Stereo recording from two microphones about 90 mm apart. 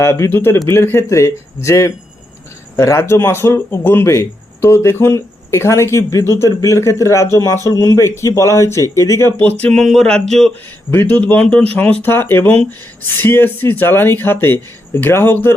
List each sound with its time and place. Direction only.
0.0 s speech: 30° left (ahead or behind)
9.4 s speech: 15° left (ahead or behind)
9.7 s speech: centre (ahead or behind)
10.9 s speech: 20° left (ahead or behind)